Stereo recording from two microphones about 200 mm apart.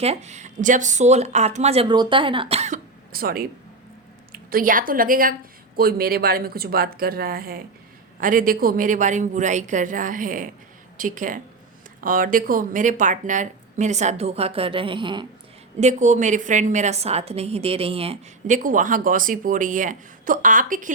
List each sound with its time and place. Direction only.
0.0 s a woman's voice: 30° right (ahead or behind)
15.8 s a woman's voice: 35° right (ahead or behind)